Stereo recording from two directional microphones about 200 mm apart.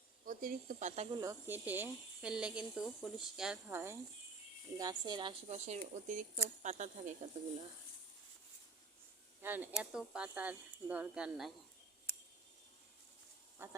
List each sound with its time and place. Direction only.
0.3 s speech: 45° right (ahead or behind)
1.2 s speech: 15° right (ahead or behind); by 7.2 s 35° right (ahead or behind)
9.4 s speech: 10° right (ahead or behind)
13.6 s speech: 10° right (ahead or behind)